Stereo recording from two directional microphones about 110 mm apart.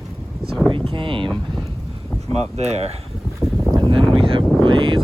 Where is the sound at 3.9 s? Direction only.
50° right (ahead or behind).